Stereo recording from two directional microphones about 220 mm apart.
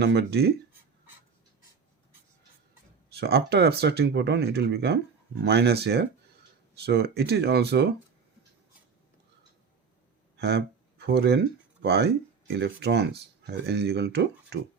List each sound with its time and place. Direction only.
0.0 s speech: 50° right (ahead or behind)
3.1 s speech: 45° right (ahead or behind)
10.3 s a sound: 45° right (ahead or behind)
11.8 s speech: 50° right (ahead or behind)